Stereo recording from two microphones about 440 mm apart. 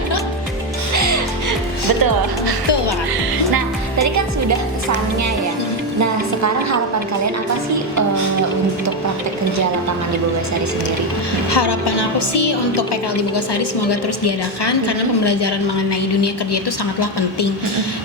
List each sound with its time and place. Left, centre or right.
0.9 s music: right
6.0 s a woman's voice: right
11.5 s a woman's voice: left